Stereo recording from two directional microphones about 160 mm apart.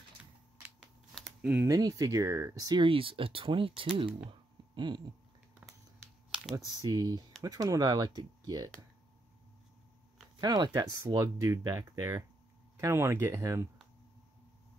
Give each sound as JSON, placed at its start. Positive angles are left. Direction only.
{"t": 0.2, "sound": "typing", "side_deg": -5}
{"t": 1.1, "sound": "a sound", "side_deg": -5}
{"t": 1.7, "sound": "speech", "side_deg": -25}
{"t": 6.7, "sound": "speech", "side_deg": -25}
{"t": 10.4, "sound": "speech", "side_deg": -25}